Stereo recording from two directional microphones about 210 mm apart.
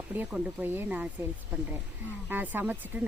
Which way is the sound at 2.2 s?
10° right (ahead or behind).